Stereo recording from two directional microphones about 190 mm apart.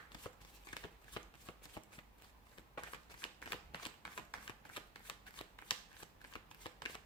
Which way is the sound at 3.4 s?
25° left (ahead or behind).